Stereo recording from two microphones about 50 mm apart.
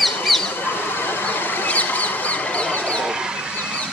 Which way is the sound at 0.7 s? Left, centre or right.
Left.